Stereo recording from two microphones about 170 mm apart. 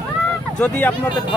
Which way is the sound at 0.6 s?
10° left (ahead or behind).